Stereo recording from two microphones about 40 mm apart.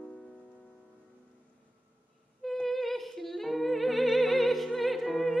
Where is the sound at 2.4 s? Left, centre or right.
Centre.